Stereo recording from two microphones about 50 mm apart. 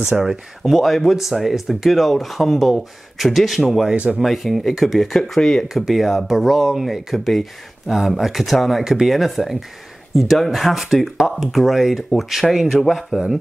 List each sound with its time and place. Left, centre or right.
0.2 s speech: centre
3.9 s speech: right
4.2 s speech: centre
5.7 s speech: centre